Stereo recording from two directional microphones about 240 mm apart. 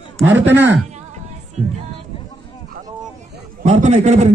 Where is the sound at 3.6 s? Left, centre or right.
Right.